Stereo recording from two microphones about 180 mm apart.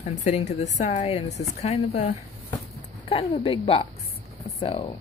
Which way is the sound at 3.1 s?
30° left (ahead or behind).